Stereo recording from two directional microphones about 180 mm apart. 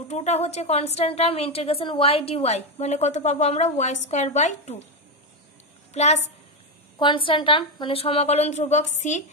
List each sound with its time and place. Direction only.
0.1 s a woman's voice: 40° left (ahead or behind)
5.9 s a woman's voice: 35° left (ahead or behind)